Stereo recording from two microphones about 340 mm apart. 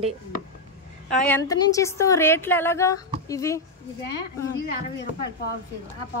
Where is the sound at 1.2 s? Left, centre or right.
Centre.